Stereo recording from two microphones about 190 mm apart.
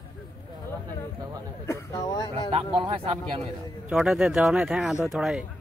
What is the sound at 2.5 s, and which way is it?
Speech, 25° right (ahead or behind).